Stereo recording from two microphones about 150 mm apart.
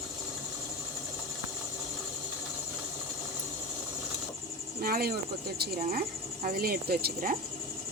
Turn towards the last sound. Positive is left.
turn(degrees=-80)